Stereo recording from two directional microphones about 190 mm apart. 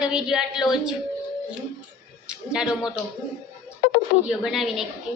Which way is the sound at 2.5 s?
5° right (ahead or behind).